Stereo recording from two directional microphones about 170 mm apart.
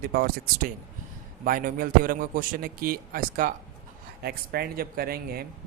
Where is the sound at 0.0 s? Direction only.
65° right (ahead or behind).